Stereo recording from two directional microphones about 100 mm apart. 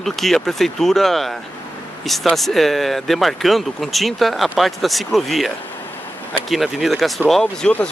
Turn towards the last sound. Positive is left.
turn(degrees=10)  # may be behind; listen again after turning